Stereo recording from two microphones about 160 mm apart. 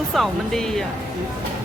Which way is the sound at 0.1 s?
Centre (ahead or behind).